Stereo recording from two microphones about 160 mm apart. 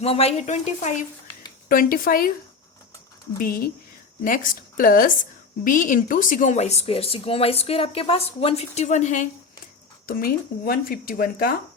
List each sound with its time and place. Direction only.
0.0 s a woman's voice: 40° left (ahead or behind)
1.6 s a woman's voice: 60° left (ahead or behind)
3.3 s a woman's voice: 65° left (ahead or behind)
10.1 s speech: 65° left (ahead or behind)